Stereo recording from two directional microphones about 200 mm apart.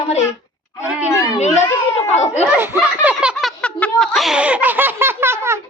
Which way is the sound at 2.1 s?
35° left (ahead or behind).